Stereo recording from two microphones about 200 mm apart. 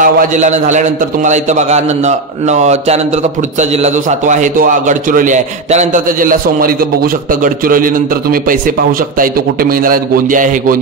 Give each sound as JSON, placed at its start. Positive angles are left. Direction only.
{"t": 0.0, "sound": "a man's voice", "side_deg": -40}